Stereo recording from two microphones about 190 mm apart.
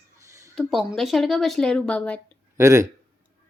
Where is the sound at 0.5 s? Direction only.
Centre (ahead or behind).